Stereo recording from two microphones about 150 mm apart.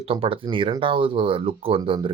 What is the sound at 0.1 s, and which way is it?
Speech, 35° right (ahead or behind).